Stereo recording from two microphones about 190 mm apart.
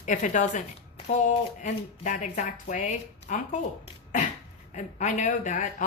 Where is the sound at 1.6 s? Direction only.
40° left (ahead or behind).